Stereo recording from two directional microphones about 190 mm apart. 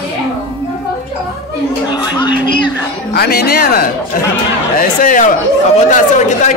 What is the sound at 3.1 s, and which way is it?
Speech, 55° left (ahead or behind).